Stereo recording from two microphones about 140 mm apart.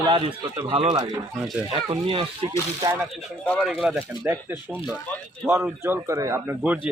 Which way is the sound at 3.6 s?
5° right (ahead or behind).